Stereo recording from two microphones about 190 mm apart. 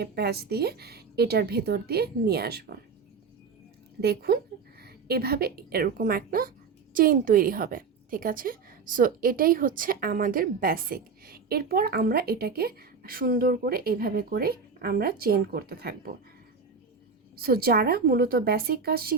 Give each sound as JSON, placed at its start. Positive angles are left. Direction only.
{"t": 0.0, "sound": "a woman's voice", "side_deg": -55}
{"t": 4.0, "sound": "a woman's voice", "side_deg": -55}
{"t": 17.3, "sound": "a woman's voice", "side_deg": -55}